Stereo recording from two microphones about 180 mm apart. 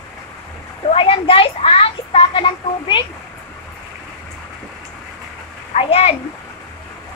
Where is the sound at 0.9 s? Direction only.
30° left (ahead or behind).